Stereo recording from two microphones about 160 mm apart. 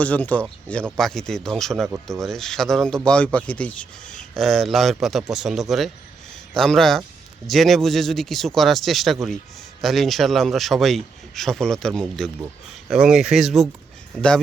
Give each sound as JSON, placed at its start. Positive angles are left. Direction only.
{"t": 0.0, "sound": "a man's voice", "side_deg": 10}